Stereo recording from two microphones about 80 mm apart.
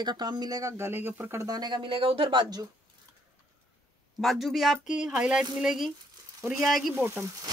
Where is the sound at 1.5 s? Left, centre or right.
Right.